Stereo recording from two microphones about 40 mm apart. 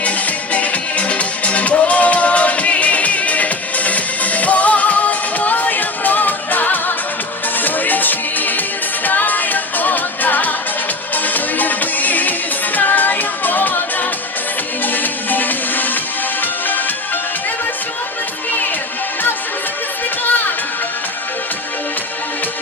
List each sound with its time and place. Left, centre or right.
0.0 s music: left